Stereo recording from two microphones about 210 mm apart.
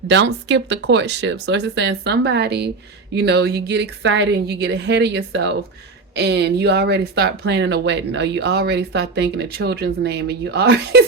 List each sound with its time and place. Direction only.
0.1 s speech: 55° right (ahead or behind)